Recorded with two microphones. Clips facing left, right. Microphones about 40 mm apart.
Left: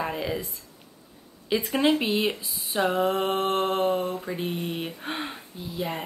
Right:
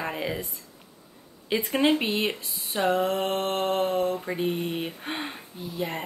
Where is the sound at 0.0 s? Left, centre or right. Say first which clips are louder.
Left 1 dB; centre.